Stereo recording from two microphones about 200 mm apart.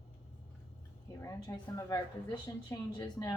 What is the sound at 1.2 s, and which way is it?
A woman's voice, 15° left (ahead or behind).